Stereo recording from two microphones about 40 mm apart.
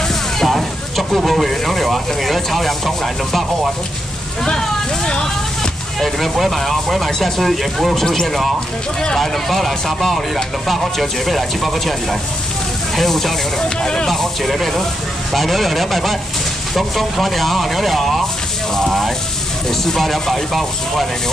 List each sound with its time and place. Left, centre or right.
0.1 s speech: centre
4.5 s speech: left
5.9 s speech: centre
13.8 s speech: centre
14.1 s speech: centre
18.9 s a sound: centre
19.8 s speech: centre